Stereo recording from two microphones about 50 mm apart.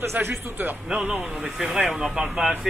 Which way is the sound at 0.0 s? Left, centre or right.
Right.